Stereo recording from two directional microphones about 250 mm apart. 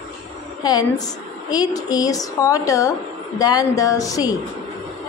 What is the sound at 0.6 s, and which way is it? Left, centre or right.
A woman's voice, centre.